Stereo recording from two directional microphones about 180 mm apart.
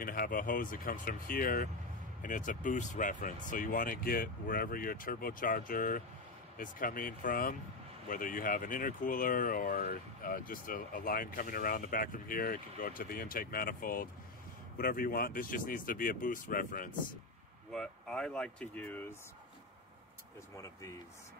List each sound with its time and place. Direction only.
0.0 s speech: 50° left (ahead or behind)
17.6 s speech: 5° left (ahead or behind)